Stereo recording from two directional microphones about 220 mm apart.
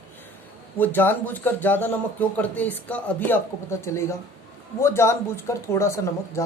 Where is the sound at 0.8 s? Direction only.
10° left (ahead or behind).